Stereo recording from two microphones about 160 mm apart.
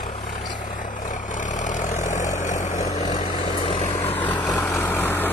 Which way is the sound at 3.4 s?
35° left (ahead or behind).